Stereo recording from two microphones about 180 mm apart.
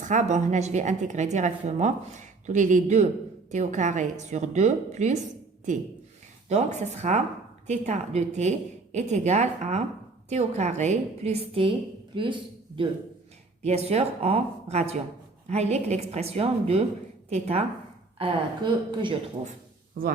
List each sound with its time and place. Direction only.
0.0 s a woman's voice: 45° right (ahead or behind)
6.5 s a woman's voice: 40° right (ahead or behind)
20.0 s speech: 50° right (ahead or behind)